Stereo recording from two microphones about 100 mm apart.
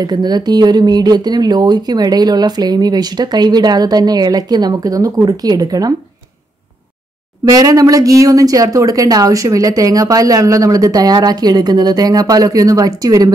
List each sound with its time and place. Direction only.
0.0 s speech: 45° right (ahead or behind)
7.4 s speech: 40° right (ahead or behind)